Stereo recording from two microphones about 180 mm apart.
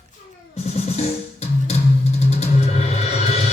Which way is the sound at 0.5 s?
35° left (ahead or behind).